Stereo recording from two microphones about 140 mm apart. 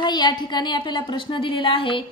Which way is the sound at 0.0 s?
30° left (ahead or behind).